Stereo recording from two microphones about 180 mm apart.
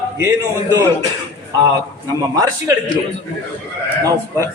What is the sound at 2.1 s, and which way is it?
Speech, 20° right (ahead or behind).